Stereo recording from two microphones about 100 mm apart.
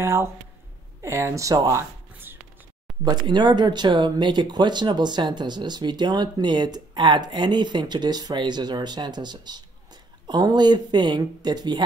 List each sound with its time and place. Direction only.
0.0 s speech: 25° right (ahead or behind)
2.3 s a sound: 20° right (ahead or behind)
3.1 s speech: 50° right (ahead or behind)